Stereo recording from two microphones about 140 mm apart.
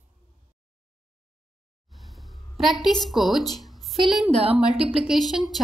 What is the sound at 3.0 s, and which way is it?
A woman's voice, centre (ahead or behind).